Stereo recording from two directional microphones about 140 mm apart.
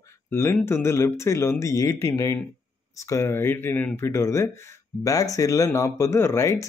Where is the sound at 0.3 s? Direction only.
15° left (ahead or behind).